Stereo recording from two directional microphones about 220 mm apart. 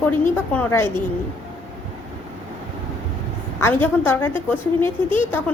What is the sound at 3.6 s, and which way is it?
A woman's voice, 10° left (ahead or behind).